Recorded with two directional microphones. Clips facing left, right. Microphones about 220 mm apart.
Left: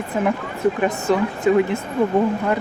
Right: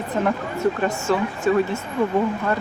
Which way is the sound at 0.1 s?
10° left (ahead or behind).